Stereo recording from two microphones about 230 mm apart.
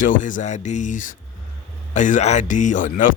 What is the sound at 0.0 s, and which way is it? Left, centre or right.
Speech, left.